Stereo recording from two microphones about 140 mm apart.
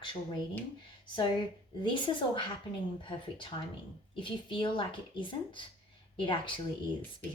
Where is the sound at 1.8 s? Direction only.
35° left (ahead or behind).